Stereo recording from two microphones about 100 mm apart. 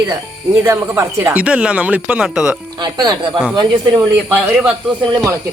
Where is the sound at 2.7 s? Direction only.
45° right (ahead or behind).